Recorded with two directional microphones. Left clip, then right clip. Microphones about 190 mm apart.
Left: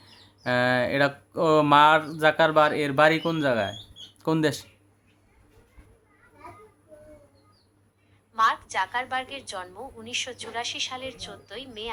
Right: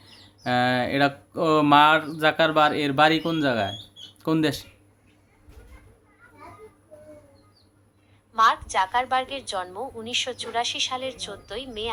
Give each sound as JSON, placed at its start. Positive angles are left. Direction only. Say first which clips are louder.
{"t": 0.0, "sound": "speech", "louder": "right 1 dB", "side_deg": 10}
{"t": 8.3, "sound": "a woman's voice", "louder": "right 3 dB", "side_deg": -30}